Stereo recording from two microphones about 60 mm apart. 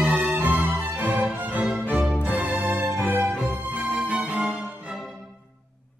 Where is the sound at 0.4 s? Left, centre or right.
Right.